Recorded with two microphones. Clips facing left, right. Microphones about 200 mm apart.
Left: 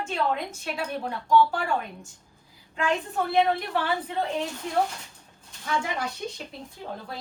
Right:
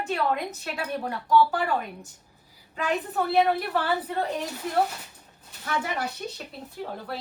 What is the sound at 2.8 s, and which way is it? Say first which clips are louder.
A woman's voice: right 1 dB; 5° right (ahead or behind).